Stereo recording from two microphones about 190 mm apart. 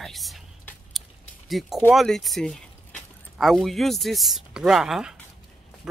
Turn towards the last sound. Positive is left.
turn(degrees=0)  # may be behind; listen again after turning